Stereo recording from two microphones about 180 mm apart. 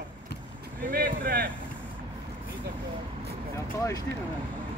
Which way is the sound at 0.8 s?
50° right (ahead or behind).